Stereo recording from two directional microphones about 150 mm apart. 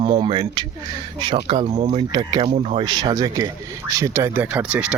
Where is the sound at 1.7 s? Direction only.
50° right (ahead or behind).